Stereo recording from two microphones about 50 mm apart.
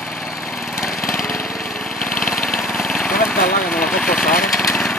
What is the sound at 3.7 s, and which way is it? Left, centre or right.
Engine, centre.